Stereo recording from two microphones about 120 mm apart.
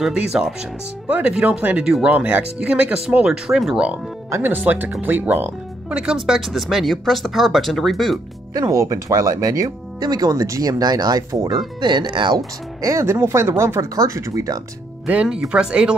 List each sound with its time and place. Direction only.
0.0 s speech: 5° right (ahead or behind)
8.5 s speech: 30° right (ahead or behind)
12.4 s speech: 25° right (ahead or behind)
15.0 s speech: 10° right (ahead or behind)